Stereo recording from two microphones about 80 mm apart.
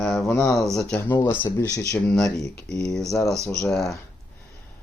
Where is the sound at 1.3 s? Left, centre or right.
Left.